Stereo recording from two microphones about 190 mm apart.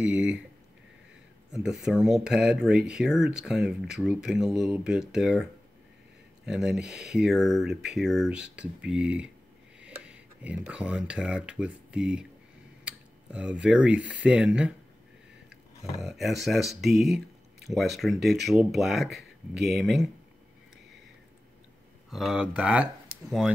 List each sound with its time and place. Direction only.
0.0 s speech: 5° right (ahead or behind)
1.5 s speech: 5° right (ahead or behind)
22.1 s speech: centre (ahead or behind)
23.1 s a sound: 50° right (ahead or behind)